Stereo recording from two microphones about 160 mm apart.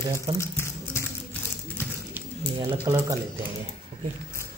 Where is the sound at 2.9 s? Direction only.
20° right (ahead or behind).